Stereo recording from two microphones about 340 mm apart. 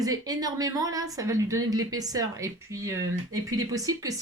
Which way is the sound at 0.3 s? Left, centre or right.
Centre.